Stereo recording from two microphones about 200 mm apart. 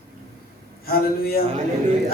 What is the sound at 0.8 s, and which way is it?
Speech, 50° left (ahead or behind).